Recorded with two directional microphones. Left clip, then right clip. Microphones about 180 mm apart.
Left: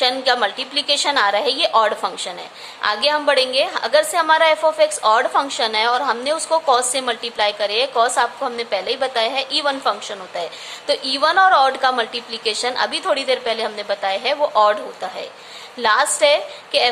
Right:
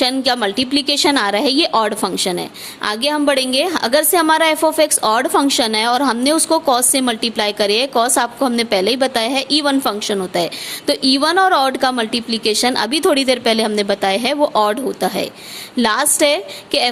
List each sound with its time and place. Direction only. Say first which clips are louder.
0.0 s a woman's voice: right 1 dB; 45° right (ahead or behind)